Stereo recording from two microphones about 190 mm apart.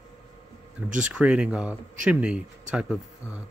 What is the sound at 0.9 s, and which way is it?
Speech, 5° right (ahead or behind).